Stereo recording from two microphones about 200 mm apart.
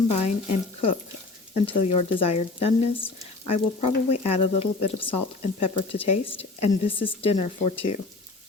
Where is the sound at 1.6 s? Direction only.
30° left (ahead or behind).